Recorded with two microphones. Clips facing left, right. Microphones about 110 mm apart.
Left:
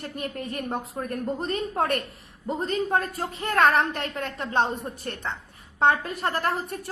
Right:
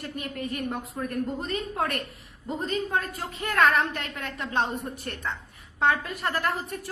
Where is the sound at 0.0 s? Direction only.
35° left (ahead or behind).